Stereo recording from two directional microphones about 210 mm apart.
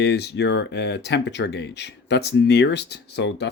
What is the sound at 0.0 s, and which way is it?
Speech, 50° left (ahead or behind).